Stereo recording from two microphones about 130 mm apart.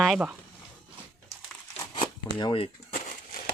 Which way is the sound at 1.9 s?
35° left (ahead or behind).